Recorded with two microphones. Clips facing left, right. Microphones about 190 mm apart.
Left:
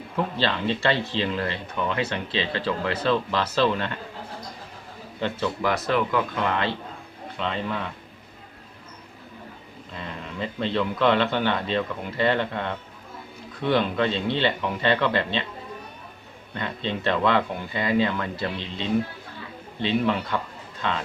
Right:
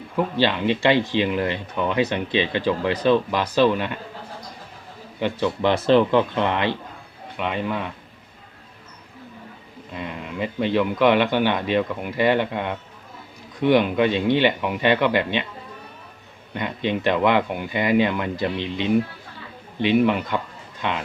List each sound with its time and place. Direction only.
0.3 s speech: 15° right (ahead or behind)
5.6 s speech: 30° right (ahead or behind)
9.9 s speech: 15° right (ahead or behind)
16.6 s speech: 15° right (ahead or behind)